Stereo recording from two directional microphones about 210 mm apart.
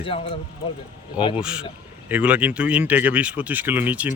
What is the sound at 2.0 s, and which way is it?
Speech, 5° right (ahead or behind).